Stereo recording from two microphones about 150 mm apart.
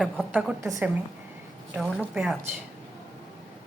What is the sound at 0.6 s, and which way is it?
Speech, 20° right (ahead or behind).